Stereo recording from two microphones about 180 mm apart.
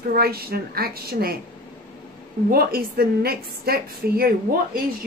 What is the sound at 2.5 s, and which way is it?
A woman's voice, 55° right (ahead or behind).